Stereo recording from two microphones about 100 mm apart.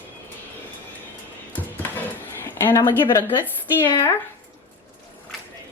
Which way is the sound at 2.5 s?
20° left (ahead or behind).